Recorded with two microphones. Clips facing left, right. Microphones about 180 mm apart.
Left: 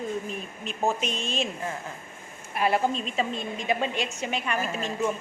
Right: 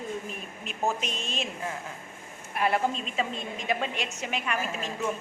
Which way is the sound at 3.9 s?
30° left (ahead or behind).